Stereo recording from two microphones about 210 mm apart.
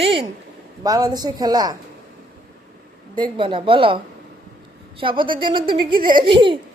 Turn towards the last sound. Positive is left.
turn(degrees=-25)  # may be behind; listen again after turning